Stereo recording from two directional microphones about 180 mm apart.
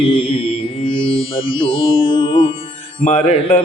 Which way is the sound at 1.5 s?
30° left (ahead or behind).